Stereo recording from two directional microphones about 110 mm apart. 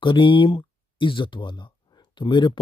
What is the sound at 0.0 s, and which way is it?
Speech, 50° left (ahead or behind).